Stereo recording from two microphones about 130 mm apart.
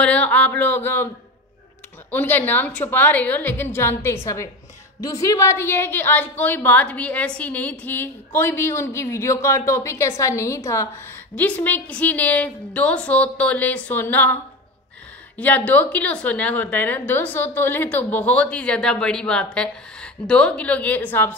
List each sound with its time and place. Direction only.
0.0 s a woman's voice: 10° left (ahead or behind)
11.3 s a woman's voice: 10° left (ahead or behind)